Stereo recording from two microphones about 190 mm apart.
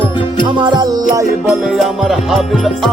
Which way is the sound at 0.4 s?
25° right (ahead or behind).